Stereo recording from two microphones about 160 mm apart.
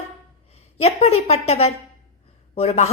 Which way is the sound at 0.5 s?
40° left (ahead or behind).